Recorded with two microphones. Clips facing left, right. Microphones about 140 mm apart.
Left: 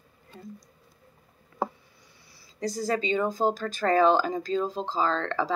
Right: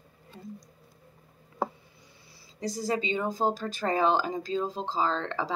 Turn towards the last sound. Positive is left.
turn(degrees=-20)  # may be behind; listen again after turning